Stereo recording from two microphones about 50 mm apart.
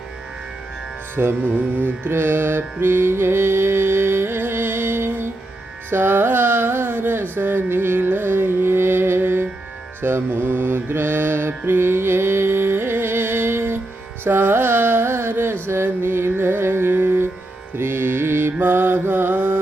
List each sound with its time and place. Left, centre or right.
1.1 s music: right
10.0 s mantra: right
14.3 s carnatic music: right
15.6 s music: right
17.7 s mantra: right
19.3 s carnatic music: right